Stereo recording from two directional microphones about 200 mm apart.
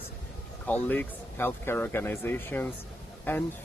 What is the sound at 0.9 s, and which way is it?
Speech, 10° left (ahead or behind).